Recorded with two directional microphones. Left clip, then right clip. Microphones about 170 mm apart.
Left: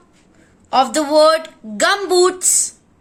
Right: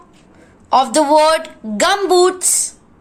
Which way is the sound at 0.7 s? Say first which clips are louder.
Right 3 dB; 20° left (ahead or behind).